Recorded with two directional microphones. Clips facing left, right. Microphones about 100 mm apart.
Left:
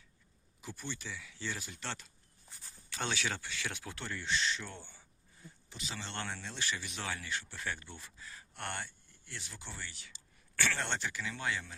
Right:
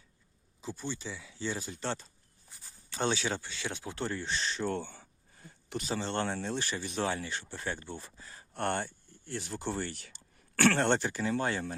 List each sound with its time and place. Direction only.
0.6 s speech: 25° right (ahead or behind)
4.7 s speech: 85° right; by 11.7 s 40° right (ahead or behind)